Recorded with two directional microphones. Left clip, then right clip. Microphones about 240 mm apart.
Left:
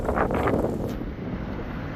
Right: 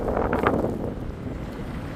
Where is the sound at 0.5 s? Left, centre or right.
Centre.